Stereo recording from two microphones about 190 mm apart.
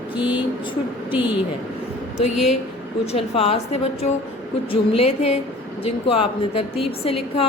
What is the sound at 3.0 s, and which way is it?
A woman's voice, 30° left (ahead or behind).